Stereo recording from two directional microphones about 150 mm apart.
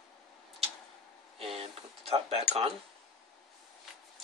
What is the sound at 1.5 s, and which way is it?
Speech, 40° right (ahead or behind).